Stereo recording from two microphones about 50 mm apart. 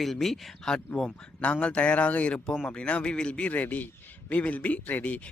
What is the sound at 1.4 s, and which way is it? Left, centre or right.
Speech, left.